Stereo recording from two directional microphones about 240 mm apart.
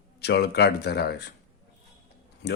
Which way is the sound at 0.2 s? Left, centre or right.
Left.